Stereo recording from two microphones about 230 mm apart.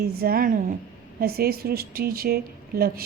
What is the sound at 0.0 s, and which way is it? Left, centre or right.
A woman's voice, right.